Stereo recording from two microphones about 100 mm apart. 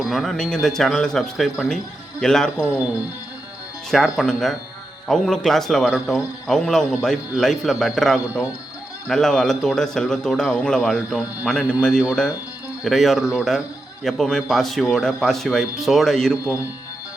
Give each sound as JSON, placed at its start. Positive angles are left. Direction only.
{"t": 0.1, "sound": "a man's voice", "side_deg": 5}
{"t": 3.9, "sound": "a man's voice", "side_deg": 0}